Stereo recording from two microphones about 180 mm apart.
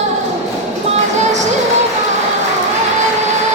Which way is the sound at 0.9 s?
40° right (ahead or behind).